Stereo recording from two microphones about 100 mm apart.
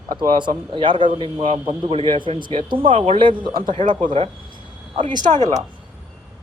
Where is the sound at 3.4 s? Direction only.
50° right (ahead or behind).